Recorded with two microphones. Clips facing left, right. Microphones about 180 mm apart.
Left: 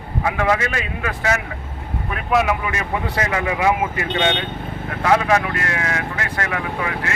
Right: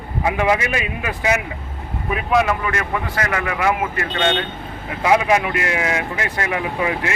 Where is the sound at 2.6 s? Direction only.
20° left (ahead or behind).